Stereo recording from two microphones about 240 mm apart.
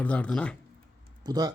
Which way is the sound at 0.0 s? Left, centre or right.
Centre.